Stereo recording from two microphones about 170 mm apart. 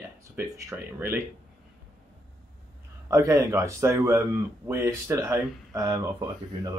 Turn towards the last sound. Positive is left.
turn(degrees=-25)  # may be behind; listen again after turning